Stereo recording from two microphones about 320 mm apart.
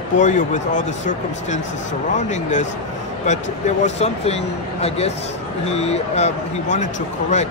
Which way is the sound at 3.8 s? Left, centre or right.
Centre.